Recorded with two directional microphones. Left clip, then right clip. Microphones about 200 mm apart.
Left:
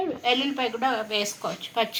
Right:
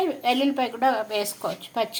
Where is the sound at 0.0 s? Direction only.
55° right (ahead or behind).